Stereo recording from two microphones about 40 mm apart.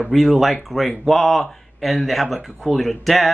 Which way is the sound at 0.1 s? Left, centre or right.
Centre.